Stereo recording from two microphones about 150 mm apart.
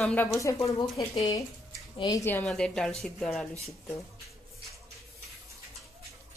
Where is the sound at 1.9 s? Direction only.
30° left (ahead or behind).